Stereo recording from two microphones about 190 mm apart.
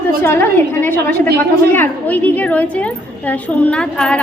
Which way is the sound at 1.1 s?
55° right (ahead or behind).